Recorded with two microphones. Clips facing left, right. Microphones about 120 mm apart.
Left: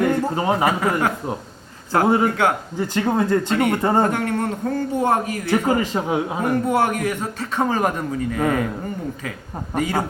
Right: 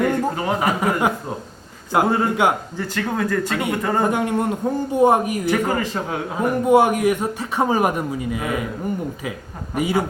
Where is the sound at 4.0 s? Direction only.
15° right (ahead or behind).